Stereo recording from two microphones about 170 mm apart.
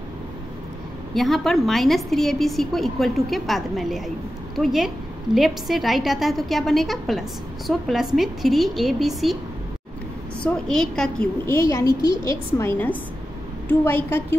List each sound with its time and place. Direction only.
1.1 s a woman's voice: centre (ahead or behind)
10.4 s a woman's voice: 5° left (ahead or behind)
11.4 s a woman's voice: 15° left (ahead or behind)